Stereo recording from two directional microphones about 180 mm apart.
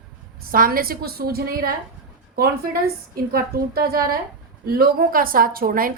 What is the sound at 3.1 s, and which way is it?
A woman's voice, 55° right (ahead or behind).